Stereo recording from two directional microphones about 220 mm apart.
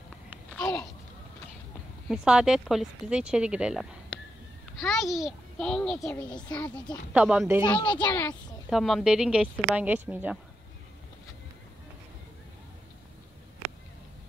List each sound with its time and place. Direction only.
2.0 s speech: 5° right (ahead or behind)
7.1 s speech: 5° right (ahead or behind)
7.6 s a child's voice: 20° left (ahead or behind)
8.0 s a child's voice: 10° left (ahead or behind); by 10.4 s 5° right (ahead or behind)